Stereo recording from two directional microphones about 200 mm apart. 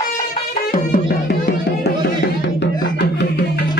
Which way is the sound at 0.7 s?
45° left (ahead or behind).